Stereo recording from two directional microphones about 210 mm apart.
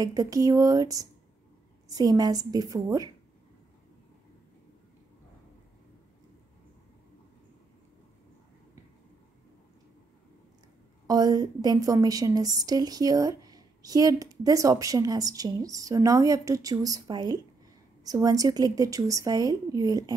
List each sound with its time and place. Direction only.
0.0 s a woman's voice: 15° right (ahead or behind)
11.1 s a woman's voice: 20° right (ahead or behind)